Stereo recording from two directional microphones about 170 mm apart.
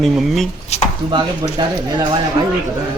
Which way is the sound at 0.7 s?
40° left (ahead or behind).